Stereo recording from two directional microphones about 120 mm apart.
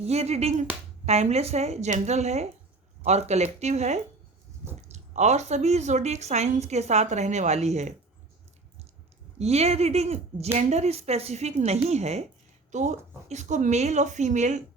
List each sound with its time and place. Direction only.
0.0 s a woman's voice: 65° right (ahead or behind)
9.4 s a woman's voice: 60° right (ahead or behind)
12.7 s speech: 80° right